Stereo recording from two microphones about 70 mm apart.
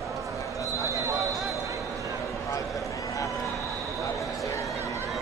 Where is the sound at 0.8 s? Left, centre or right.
Right.